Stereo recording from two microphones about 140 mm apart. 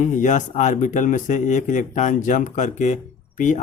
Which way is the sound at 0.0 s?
60° left (ahead or behind).